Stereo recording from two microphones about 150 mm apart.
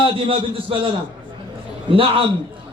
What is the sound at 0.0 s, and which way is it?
Speech, 35° right (ahead or behind).